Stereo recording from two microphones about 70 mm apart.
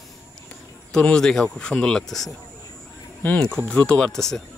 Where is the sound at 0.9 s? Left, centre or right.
Centre.